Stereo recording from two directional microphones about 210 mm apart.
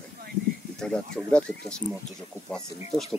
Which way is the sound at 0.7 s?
5° left (ahead or behind).